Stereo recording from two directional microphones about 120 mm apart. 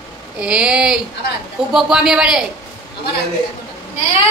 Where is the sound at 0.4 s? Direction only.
5° right (ahead or behind).